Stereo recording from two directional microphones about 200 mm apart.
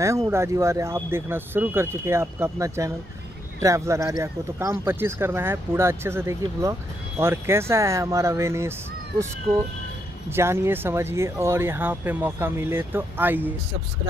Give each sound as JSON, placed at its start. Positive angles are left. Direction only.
{"t": 0.3, "sound": "speech", "side_deg": -15}
{"t": 10.3, "sound": "speech", "side_deg": -10}